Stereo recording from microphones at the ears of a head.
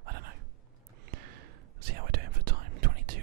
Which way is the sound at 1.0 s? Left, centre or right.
Right.